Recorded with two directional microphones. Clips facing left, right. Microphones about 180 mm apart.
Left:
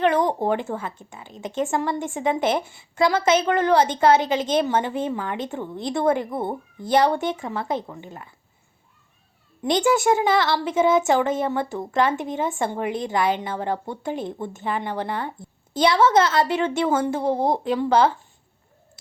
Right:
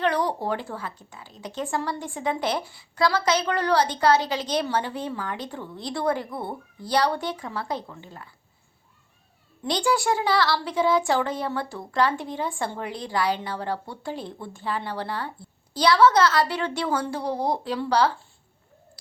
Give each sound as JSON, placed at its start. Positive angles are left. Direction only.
{"t": 0.0, "sound": "a woman's voice", "side_deg": 20}
{"t": 9.6, "sound": "a woman's voice", "side_deg": 20}